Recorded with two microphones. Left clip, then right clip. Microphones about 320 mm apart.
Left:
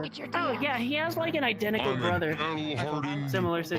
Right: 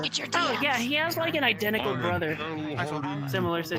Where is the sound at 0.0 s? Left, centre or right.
Right.